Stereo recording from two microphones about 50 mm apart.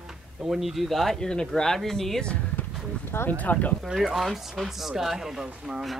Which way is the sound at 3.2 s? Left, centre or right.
Left.